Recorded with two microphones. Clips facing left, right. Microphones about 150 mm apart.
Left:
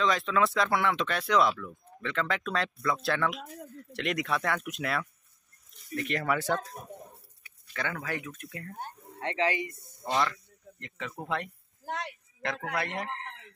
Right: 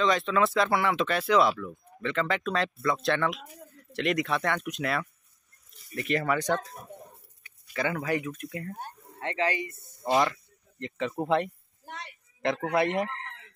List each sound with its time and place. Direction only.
0.0 s speech: centre (ahead or behind)
7.6 s speech: 10° right (ahead or behind)
9.2 s speech: 20° left (ahead or behind)
10.0 s speech: 10° right (ahead or behind)
10.8 s speech: 25° right (ahead or behind)
11.8 s a sound: 90° left
12.4 s speech: 25° right (ahead or behind)